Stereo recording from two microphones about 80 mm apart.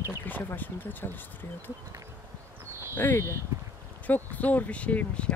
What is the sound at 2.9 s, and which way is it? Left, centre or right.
Speech, left.